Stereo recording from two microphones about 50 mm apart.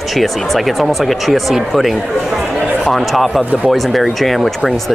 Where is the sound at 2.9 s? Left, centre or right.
Centre.